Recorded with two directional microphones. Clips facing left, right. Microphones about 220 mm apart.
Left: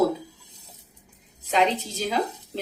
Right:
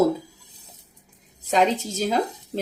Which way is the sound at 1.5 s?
45° right (ahead or behind).